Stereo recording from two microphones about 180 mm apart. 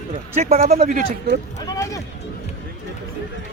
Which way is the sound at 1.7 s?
20° left (ahead or behind).